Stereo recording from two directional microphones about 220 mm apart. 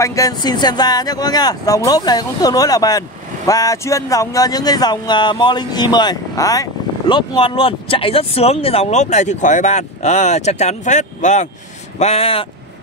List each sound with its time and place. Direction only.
0.0 s speech: 15° left (ahead or behind)